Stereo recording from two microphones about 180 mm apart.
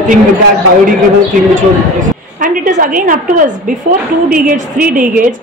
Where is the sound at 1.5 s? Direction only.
45° right (ahead or behind).